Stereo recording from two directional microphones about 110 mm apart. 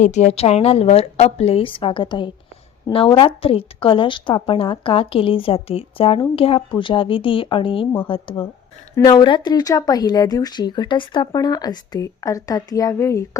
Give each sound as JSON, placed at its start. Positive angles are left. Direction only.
{"t": 0.0, "sound": "a woman's voice", "side_deg": 90}